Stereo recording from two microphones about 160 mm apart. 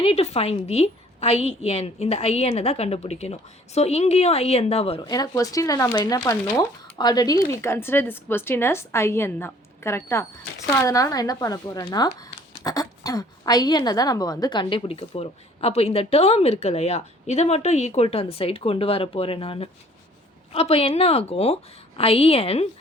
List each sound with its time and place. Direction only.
0.0 s a woman's voice: 40° left (ahead or behind)